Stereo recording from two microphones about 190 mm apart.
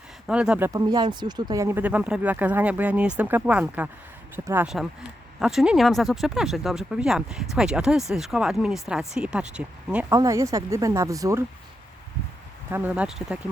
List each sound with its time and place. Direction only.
0.3 s speech: 5° right (ahead or behind)
0.7 s speech: 20° right (ahead or behind); by 10.1 s 5° right (ahead or behind)
10.1 s speech: 15° right (ahead or behind)
12.7 s speech: 10° right (ahead or behind)